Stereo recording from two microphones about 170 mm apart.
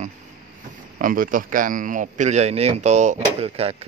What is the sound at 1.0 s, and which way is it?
A man's voice, 55° right (ahead or behind).